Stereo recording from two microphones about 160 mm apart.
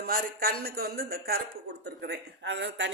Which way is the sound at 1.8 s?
90° right.